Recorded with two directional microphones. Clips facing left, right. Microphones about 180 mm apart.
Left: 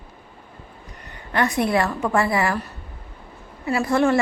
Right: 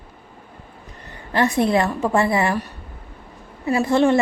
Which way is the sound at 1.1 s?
25° right (ahead or behind).